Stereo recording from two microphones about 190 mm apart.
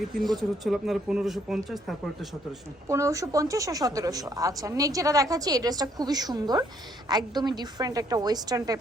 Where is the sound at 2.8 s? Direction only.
15° right (ahead or behind).